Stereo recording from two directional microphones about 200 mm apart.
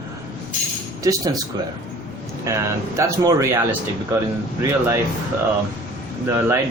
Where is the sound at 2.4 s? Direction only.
15° right (ahead or behind).